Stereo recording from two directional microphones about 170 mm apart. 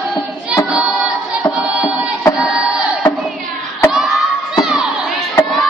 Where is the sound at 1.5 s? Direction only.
5° right (ahead or behind).